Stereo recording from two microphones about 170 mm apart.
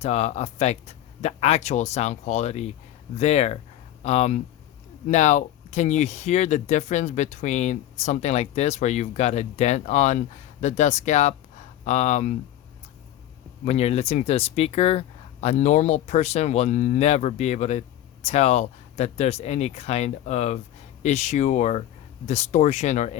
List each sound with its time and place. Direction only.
0.0 s speech: 40° left (ahead or behind)
13.7 s speech: 40° left (ahead or behind)